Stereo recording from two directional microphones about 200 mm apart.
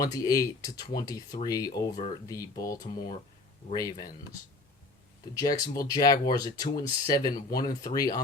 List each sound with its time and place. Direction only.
0.0 s speech: 15° left (ahead or behind)
5.3 s speech: 15° left (ahead or behind)